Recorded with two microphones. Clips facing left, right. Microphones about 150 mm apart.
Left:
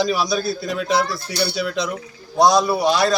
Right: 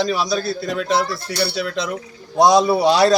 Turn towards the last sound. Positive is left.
turn(degrees=-35)  # may be behind; listen again after turning